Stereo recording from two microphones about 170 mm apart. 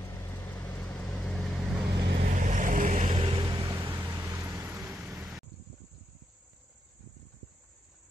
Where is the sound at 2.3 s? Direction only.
45° right (ahead or behind).